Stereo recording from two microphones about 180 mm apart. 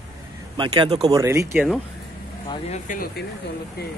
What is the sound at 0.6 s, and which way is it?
Speech, 25° right (ahead or behind).